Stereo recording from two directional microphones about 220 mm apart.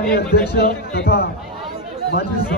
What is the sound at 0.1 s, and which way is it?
A man's voice, 45° left (ahead or behind).